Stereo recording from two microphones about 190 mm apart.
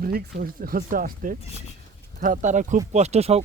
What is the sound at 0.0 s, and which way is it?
Speech, 50° right (ahead or behind).